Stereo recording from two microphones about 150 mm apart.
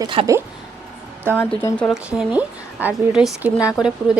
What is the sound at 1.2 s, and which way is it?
Speech, 10° left (ahead or behind).